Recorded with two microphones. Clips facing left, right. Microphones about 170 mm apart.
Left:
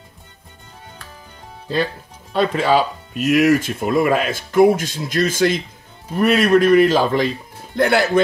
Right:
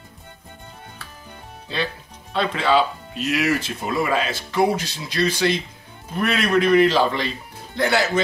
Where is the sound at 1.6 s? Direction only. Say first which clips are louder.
Left 6 dB; 45° left (ahead or behind).